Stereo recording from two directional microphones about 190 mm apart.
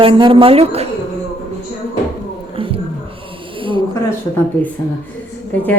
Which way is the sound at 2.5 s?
30° right (ahead or behind).